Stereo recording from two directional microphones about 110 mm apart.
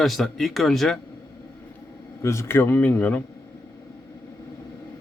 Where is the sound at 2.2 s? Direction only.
25° left (ahead or behind).